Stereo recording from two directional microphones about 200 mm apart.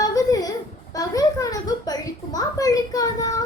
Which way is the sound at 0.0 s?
20° left (ahead or behind).